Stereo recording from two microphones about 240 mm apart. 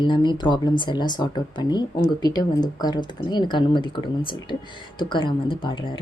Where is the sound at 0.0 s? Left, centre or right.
Centre.